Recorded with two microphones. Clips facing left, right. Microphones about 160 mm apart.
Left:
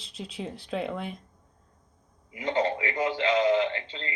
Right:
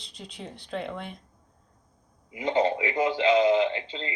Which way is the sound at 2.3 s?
15° right (ahead or behind).